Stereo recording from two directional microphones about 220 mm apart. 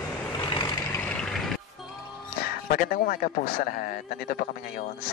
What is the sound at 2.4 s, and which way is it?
Speech, 40° left (ahead or behind).